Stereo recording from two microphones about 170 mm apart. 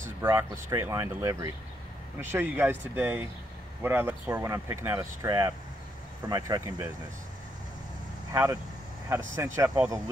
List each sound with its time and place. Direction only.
0.2 s speech: 15° right (ahead or behind)
8.3 s speech: 20° right (ahead or behind)